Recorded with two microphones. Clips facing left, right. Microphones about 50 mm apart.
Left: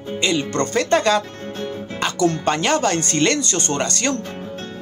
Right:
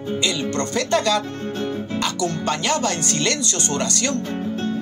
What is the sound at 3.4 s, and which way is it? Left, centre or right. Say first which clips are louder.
Speech: left 2 dB; left.